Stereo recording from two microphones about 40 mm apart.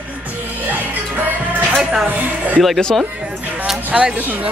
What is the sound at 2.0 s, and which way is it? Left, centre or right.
Speech, right.